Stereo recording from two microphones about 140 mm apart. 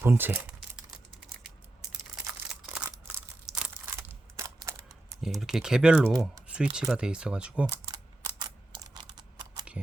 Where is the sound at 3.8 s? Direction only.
20° right (ahead or behind).